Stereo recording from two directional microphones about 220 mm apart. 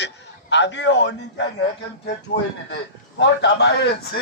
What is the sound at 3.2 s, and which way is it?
Chopping, 50° left (ahead or behind).